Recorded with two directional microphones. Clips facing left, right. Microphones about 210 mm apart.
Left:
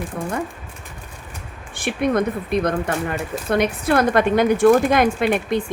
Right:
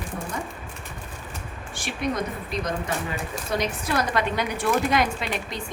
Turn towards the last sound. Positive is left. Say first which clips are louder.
# left 11 dB
turn(degrees=55)  # may be behind; listen again after turning